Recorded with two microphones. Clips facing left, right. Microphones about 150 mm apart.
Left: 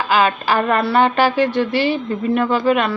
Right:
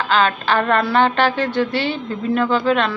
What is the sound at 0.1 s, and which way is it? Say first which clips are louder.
A woman's voice: left 1 dB; 5° left (ahead or behind).